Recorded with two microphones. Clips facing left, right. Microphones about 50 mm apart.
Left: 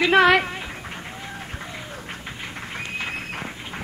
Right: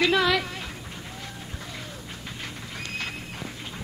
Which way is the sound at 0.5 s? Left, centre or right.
Left.